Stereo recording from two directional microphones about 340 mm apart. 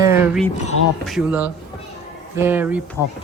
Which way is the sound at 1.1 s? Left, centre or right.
Centre.